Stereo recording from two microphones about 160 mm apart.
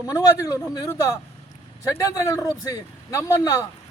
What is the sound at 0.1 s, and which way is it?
Speech, 25° left (ahead or behind).